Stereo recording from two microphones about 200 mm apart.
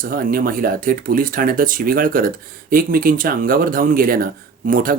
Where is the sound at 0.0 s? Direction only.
45° right (ahead or behind).